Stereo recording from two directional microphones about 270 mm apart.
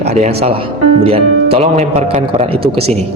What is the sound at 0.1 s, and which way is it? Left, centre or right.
A man's voice, right.